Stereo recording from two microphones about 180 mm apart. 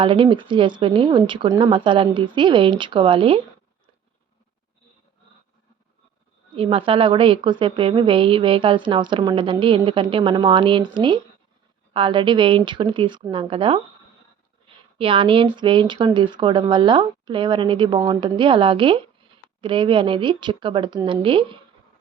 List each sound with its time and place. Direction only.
0.0 s a woman's voice: 30° right (ahead or behind)
6.6 s a woman's voice: 30° right (ahead or behind)
14.9 s a woman's voice: 30° right (ahead or behind)